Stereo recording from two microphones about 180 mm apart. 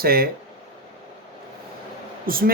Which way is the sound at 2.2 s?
50° right (ahead or behind).